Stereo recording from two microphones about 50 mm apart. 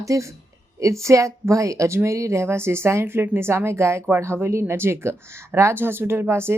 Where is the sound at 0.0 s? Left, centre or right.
Right.